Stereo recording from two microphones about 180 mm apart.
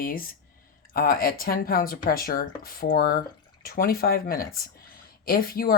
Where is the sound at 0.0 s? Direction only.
50° left (ahead or behind).